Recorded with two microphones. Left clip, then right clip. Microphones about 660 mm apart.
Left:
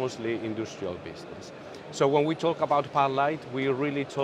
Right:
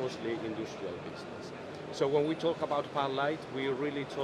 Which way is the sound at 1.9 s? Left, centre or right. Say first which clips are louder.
Left 6 dB; left.